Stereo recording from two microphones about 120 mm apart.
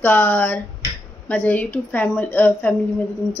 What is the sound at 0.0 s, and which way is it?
Speech, 15° left (ahead or behind).